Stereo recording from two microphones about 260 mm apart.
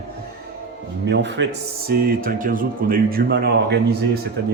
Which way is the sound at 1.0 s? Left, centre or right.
Right.